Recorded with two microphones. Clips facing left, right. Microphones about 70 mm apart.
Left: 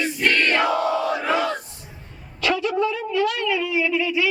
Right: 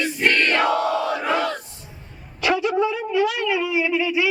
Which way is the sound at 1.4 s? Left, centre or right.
Centre.